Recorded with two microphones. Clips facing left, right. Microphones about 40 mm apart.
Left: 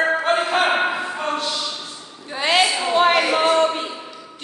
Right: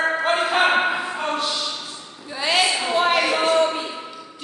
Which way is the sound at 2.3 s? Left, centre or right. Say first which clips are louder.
Left 3 dB; left.